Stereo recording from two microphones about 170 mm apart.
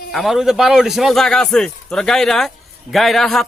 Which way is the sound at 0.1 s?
Centre (ahead or behind).